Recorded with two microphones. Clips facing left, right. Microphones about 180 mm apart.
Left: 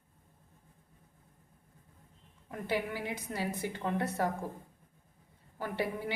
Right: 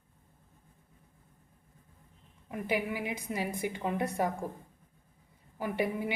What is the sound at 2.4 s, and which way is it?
A woman's voice, 15° right (ahead or behind).